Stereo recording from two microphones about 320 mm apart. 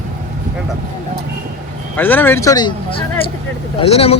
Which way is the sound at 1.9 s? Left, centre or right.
Centre.